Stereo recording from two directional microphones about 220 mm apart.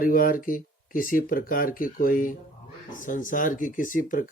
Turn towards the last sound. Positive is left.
turn(degrees=35)  # may be behind; listen again after turning